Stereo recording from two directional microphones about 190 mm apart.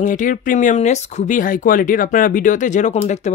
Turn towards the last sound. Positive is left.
turn(degrees=40)  # may be behind; listen again after turning